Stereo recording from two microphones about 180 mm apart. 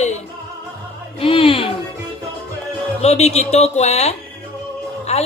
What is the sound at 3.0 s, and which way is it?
Speech, 35° left (ahead or behind).